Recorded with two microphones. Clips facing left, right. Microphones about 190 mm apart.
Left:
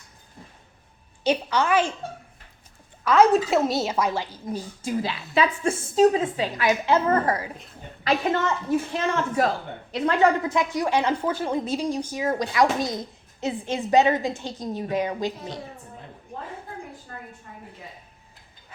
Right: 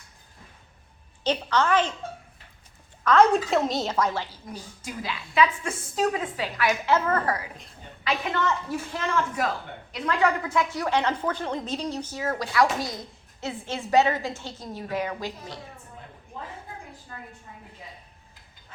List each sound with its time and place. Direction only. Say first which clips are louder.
1.2 s a woman's voice: left 2 dB; 10° left (ahead or behind)
3.0 s a woman's voice: left 2 dB; 5° left (ahead or behind)
4.4 s a woman's voice: left 8 dB; 25° left (ahead or behind)
8.9 s a woman's voice: left 2 dB; 25° left (ahead or behind)
17.1 s a sound: even; 45° left (ahead or behind)